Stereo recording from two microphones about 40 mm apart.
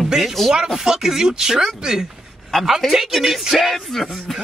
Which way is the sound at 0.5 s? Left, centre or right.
Centre.